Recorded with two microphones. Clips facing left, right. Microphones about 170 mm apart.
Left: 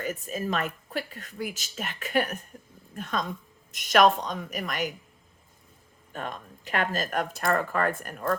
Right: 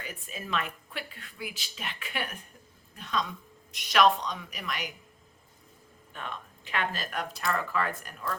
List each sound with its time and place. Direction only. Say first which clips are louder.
0.0 s speech: left 10 dB; 45° left (ahead or behind)
6.1 s speech: left 4 dB; 45° left (ahead or behind)